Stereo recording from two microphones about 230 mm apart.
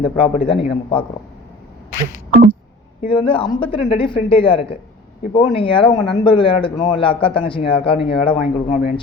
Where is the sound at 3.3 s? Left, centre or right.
Left.